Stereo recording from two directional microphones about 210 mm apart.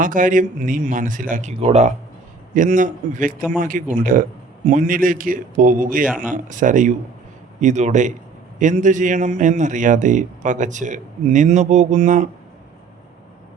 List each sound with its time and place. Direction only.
0.0 s a man's voice: 40° right (ahead or behind)